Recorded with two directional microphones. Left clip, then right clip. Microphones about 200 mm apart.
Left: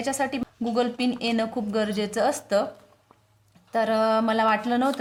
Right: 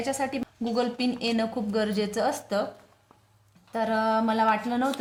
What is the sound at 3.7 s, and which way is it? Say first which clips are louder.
Speech: left 3 dB; 25° left (ahead or behind).